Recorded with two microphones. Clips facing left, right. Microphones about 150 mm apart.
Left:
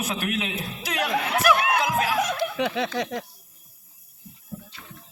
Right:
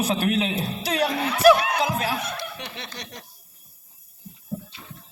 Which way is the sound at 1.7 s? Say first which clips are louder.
Left 1 dB; 35° right (ahead or behind).